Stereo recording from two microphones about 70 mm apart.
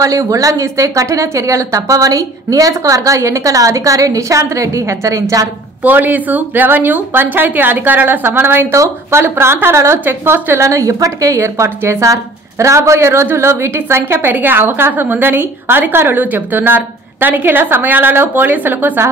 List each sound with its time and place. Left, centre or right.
0.0 s speech: right
5.9 s speech: right
8.7 s speech: right
9.2 s a woman's voice: right
10.7 s a woman's voice: right